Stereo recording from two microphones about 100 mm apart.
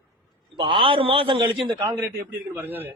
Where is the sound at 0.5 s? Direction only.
55° right (ahead or behind).